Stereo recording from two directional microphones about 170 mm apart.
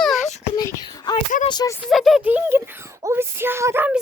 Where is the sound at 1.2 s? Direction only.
40° left (ahead or behind).